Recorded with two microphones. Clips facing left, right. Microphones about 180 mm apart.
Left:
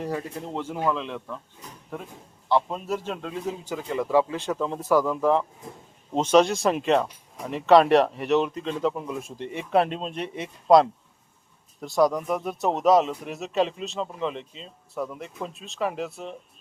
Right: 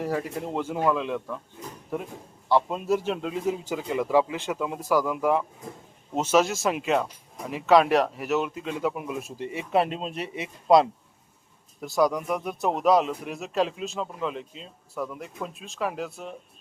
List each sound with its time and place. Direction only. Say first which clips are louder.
0.4 s speech: right 2 dB; 15° right (ahead or behind)
2.6 s speech: right 4 dB; 10° right (ahead or behind)